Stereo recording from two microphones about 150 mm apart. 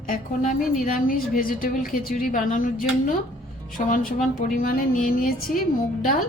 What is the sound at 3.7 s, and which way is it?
A woman's voice, 70° left (ahead or behind).